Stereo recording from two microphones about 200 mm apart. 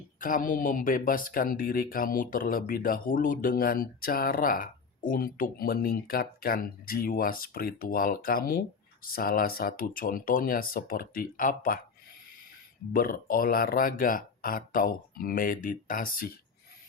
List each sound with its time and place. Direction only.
0.2 s speech: 45° left (ahead or behind)
12.9 s speech: 45° left (ahead or behind)